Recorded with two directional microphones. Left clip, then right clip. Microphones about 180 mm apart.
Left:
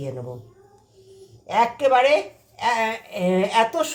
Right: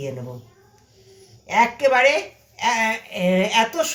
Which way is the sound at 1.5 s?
35° left (ahead or behind).